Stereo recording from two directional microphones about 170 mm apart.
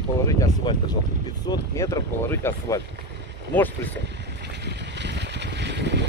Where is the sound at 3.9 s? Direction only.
85° right.